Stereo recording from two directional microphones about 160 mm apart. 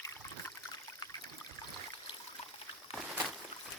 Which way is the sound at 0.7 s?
25° left (ahead or behind).